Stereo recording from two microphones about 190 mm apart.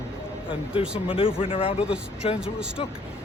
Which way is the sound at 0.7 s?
30° left (ahead or behind).